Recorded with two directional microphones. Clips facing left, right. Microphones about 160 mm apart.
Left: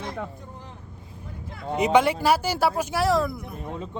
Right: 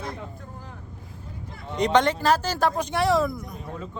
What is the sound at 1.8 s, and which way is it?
Speech, 10° left (ahead or behind).